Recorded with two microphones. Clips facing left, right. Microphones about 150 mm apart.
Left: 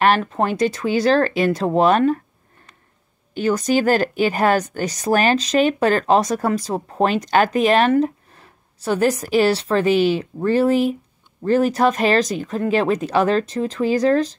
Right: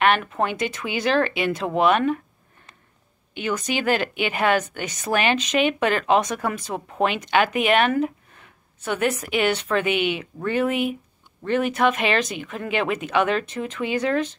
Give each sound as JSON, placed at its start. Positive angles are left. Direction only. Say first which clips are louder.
{"t": 0.0, "sound": "speech", "louder": "left 3 dB", "side_deg": 35}
{"t": 3.3, "sound": "speech", "louder": "left 7 dB", "side_deg": 40}